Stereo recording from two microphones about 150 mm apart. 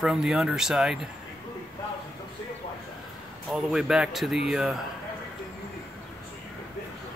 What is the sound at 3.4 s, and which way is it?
Speech, 5° right (ahead or behind).